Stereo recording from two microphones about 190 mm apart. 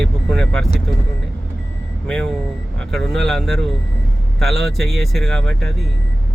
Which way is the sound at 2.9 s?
Centre (ahead or behind).